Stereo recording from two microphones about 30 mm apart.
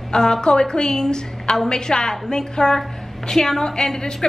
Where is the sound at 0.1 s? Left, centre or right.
Left.